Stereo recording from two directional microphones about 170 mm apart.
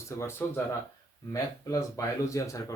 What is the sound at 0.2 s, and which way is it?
Speech, 15° left (ahead or behind).